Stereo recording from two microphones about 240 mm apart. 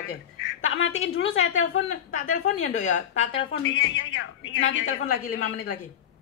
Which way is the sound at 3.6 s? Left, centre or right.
Left.